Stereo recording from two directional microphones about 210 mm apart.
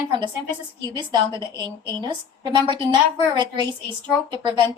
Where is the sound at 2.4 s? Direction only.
20° right (ahead or behind).